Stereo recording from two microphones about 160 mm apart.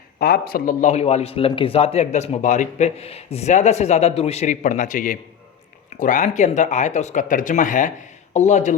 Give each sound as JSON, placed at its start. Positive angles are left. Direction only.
{"t": 0.2, "sound": "a man's voice", "side_deg": 70}